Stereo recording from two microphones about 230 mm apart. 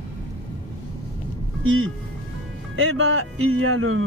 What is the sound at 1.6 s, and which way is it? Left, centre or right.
Speech, right.